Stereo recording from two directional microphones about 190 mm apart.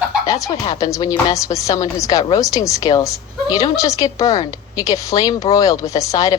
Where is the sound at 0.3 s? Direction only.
20° left (ahead or behind).